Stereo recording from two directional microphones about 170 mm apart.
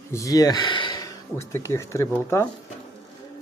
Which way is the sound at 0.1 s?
20° left (ahead or behind).